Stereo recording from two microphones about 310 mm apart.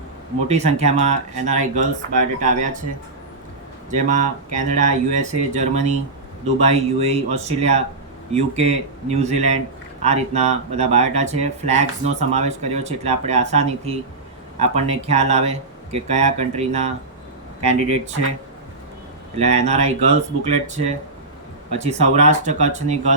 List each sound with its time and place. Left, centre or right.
0.4 s speech: right
4.5 s speech: right
19.4 s speech: right